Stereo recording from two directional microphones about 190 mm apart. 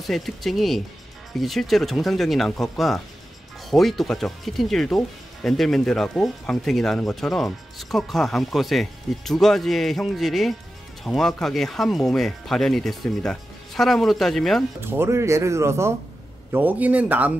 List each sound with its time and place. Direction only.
0.0 s speech: centre (ahead or behind)
14.8 s speech: 10° right (ahead or behind)